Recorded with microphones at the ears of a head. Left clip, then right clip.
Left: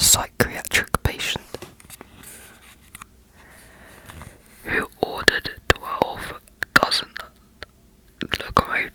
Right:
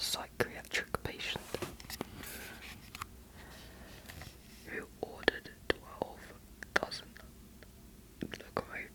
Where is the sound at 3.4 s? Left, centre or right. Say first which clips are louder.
Left 7 dB; left.